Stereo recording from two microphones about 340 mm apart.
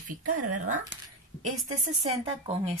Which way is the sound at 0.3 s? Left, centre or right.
Right.